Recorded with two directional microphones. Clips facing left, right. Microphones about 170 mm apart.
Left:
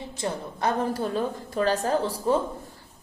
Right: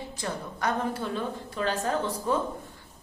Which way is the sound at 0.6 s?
30° left (ahead or behind).